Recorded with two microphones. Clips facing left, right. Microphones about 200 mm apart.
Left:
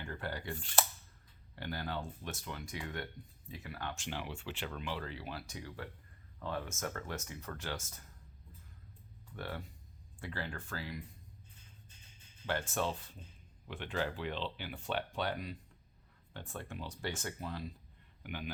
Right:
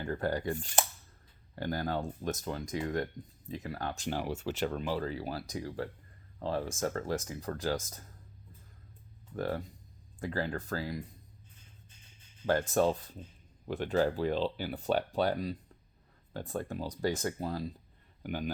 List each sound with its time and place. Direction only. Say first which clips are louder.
0.0 s speech: right 9 dB; 45° right (ahead or behind)
1.5 s speech: right 7 dB; 40° right (ahead or behind)
9.3 s speech: right 9 dB; 40° right (ahead or behind)
12.5 s speech: right 9 dB; 40° right (ahead or behind)